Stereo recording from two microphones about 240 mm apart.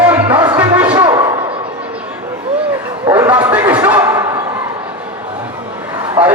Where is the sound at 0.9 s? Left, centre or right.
Centre.